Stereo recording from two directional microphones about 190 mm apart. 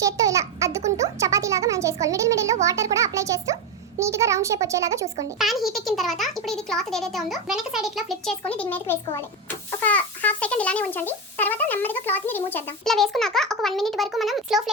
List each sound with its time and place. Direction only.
0.0 s babbling: 15° right (ahead or behind)
0.9 s music: 15° right (ahead or behind)
4.0 s a child's voice: 15° right (ahead or behind)
5.4 s a child's voice: centre (ahead or behind)